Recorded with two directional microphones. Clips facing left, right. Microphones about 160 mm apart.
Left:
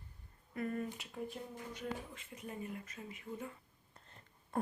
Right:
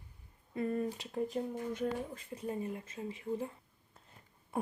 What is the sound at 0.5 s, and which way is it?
Speech, 30° right (ahead or behind).